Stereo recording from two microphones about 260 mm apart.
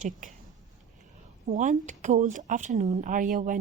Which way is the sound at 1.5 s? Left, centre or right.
Right.